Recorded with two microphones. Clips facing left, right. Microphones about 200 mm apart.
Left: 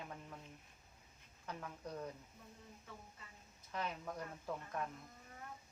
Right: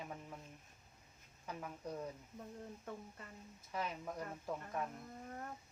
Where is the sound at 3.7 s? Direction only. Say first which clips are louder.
Right 1 dB; 10° right (ahead or behind).